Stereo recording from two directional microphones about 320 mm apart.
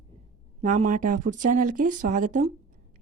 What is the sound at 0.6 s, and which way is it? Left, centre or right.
A woman's voice, right.